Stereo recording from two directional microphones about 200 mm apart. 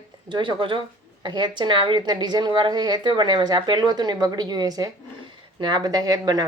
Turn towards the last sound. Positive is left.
turn(degrees=-20)  # may be behind; listen again after turning